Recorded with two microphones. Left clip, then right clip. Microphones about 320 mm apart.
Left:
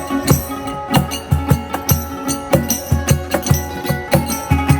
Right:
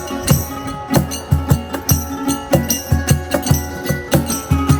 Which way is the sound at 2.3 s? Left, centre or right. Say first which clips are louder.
Even; left.